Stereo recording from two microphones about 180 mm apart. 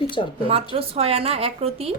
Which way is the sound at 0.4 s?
30° right (ahead or behind).